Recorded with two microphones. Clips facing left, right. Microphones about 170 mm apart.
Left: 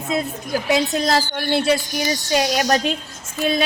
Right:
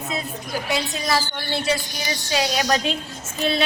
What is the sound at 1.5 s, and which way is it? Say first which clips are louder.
A woman's voice: left 6 dB; 55° left (ahead or behind).